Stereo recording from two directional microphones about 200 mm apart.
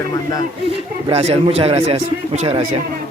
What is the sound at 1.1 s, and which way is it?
Speech, 30° right (ahead or behind).